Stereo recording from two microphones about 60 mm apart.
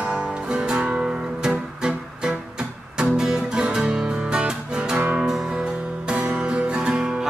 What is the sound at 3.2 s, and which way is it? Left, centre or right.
Music, centre.